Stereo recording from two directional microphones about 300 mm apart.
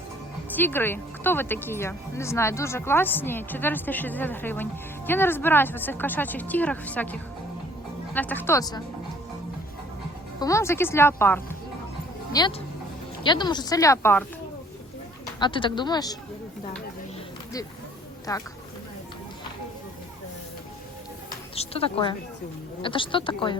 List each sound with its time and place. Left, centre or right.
0.5 s speech: centre
10.4 s speech: centre
15.4 s speech: centre
18.3 s speech: centre
21.5 s a woman's voice: centre